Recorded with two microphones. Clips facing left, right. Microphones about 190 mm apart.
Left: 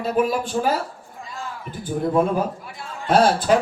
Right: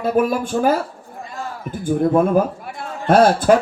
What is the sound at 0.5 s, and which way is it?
Speech, 65° right (ahead or behind).